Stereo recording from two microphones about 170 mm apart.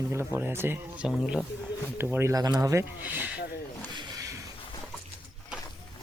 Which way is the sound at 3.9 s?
20° right (ahead or behind).